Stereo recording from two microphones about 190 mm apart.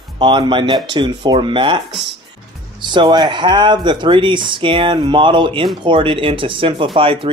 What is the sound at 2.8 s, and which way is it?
Speech, 25° right (ahead or behind).